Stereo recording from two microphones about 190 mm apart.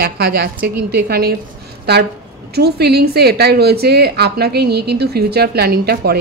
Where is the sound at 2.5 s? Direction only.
60° right (ahead or behind).